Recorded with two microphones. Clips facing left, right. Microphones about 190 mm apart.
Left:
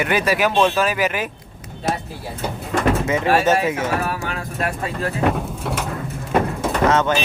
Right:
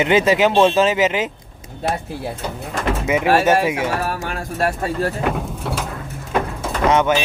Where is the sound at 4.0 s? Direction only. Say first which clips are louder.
Right 1 dB; 40° right (ahead or behind).